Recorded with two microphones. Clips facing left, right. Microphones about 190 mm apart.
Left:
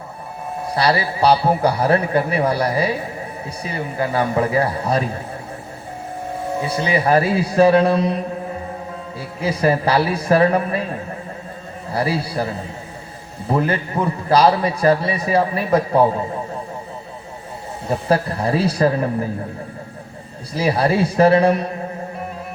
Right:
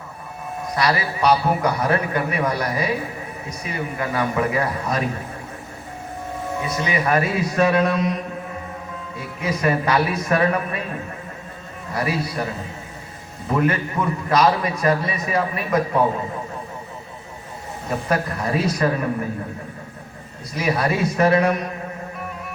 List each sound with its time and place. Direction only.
0.6 s a man's voice: 30° left (ahead or behind)
6.6 s a man's voice: 30° left (ahead or behind)
17.8 s a man's voice: 30° left (ahead or behind)
20.5 s a man's voice: 30° left (ahead or behind)